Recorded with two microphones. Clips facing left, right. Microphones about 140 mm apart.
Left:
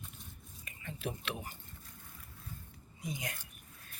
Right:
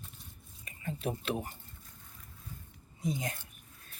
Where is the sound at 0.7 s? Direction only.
35° right (ahead or behind).